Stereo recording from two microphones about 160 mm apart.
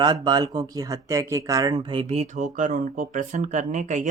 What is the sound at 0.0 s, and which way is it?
Speech, 25° right (ahead or behind).